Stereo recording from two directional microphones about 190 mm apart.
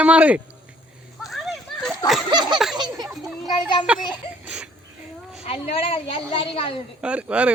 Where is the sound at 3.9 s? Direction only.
5° right (ahead or behind).